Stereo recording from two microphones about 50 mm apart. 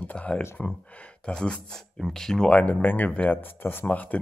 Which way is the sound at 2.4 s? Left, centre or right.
Left.